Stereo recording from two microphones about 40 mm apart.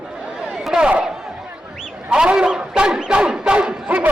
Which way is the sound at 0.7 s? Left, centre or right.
Right.